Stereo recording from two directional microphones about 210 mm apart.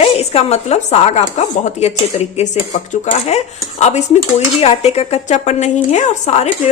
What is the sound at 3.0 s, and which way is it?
A woman's voice, 30° left (ahead or behind).